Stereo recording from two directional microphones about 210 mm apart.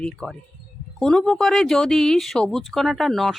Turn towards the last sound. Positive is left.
turn(degrees=0)  # may be behind; listen again after turning